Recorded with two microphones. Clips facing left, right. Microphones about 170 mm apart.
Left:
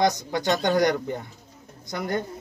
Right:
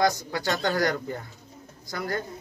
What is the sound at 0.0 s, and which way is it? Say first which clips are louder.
Speech: left 2 dB; 20° left (ahead or behind).